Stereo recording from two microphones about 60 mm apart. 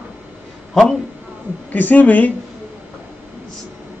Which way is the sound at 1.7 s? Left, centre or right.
Left.